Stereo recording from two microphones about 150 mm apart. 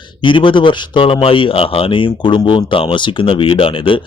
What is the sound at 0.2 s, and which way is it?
Speech, 35° left (ahead or behind).